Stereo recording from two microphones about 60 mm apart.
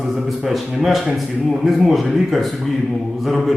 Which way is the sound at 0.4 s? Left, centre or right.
Centre.